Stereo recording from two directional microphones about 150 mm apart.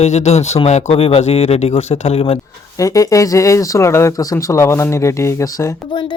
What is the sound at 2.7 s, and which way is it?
Speech, 20° left (ahead or behind).